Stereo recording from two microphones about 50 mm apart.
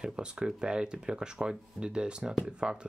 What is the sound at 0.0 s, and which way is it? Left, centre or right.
Speech, centre.